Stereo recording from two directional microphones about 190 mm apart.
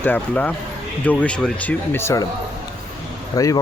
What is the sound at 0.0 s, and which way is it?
Speech, 10° left (ahead or behind).